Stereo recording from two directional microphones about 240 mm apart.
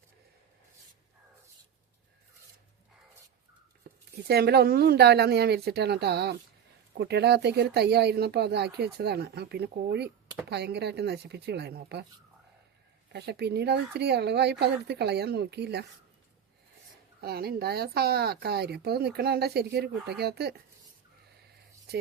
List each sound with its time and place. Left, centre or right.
3.9 s a sound: right
4.3 s speech: right
13.1 s speech: right
17.2 s speech: right